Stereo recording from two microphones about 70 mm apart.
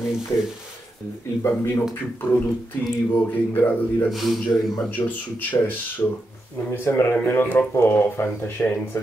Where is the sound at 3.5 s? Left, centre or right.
Left.